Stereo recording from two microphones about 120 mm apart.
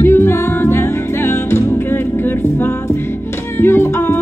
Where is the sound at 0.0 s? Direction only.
20° left (ahead or behind).